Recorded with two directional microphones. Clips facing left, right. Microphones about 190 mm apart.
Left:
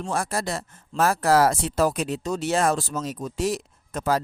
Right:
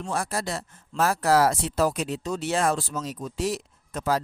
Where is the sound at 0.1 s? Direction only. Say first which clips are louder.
Left 2 dB; 45° left (ahead or behind).